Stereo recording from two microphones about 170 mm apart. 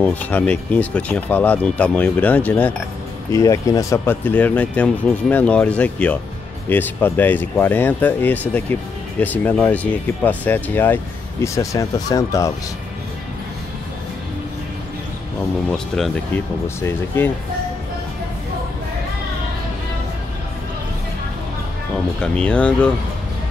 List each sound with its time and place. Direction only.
0.0 s speech: 10° left (ahead or behind)
16.6 s speech: 15° left (ahead or behind)
22.2 s speech: 5° left (ahead or behind)